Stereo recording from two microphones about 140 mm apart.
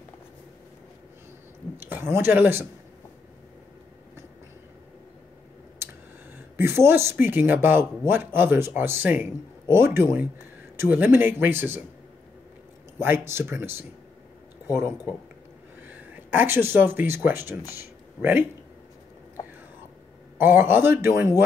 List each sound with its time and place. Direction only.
1.8 s speech: 15° right (ahead or behind)
6.5 s speech: 15° right (ahead or behind)
13.0 s speech: 15° right (ahead or behind)
16.3 s speech: 15° right (ahead or behind)
20.3 s speech: 15° right (ahead or behind)